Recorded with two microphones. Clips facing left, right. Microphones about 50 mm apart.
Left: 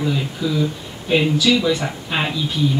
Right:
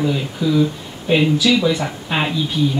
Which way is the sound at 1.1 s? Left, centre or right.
Centre.